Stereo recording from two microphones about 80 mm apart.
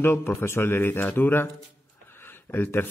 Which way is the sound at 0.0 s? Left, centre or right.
Left.